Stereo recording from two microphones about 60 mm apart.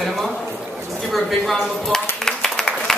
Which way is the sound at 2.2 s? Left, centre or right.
Centre.